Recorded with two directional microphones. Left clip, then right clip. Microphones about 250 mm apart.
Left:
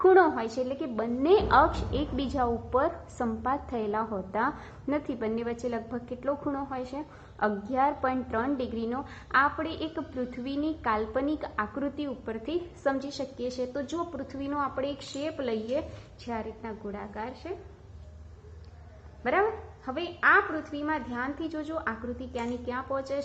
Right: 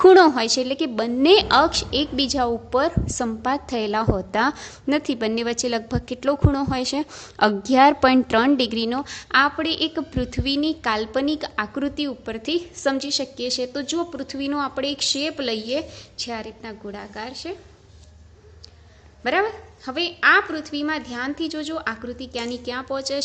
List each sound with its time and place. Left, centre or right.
0.0 s a woman's voice: right
19.2 s a woman's voice: right